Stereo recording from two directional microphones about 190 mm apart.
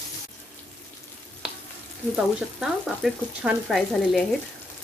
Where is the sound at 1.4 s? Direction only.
5° right (ahead or behind).